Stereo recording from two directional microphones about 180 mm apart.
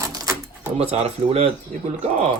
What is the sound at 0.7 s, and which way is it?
Speech, 35° right (ahead or behind).